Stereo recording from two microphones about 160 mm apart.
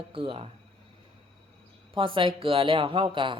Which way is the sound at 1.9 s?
30° right (ahead or behind).